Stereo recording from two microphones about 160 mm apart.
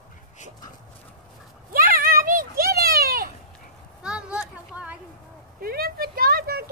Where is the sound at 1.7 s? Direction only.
65° right (ahead or behind).